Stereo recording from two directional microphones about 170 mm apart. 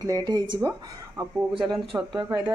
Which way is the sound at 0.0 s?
20° right (ahead or behind).